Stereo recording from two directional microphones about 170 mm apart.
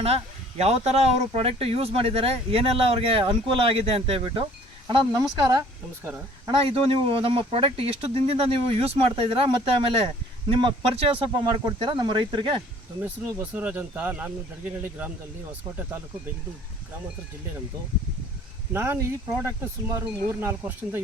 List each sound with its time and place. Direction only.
0.0 s speech: 35° right (ahead or behind)
13.0 s speech: 10° right (ahead or behind)
18.7 s speech: 15° right (ahead or behind)